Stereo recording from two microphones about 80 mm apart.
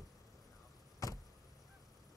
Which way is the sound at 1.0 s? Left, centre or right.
Left.